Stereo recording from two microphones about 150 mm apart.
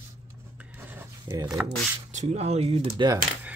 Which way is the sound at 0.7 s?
10° right (ahead or behind).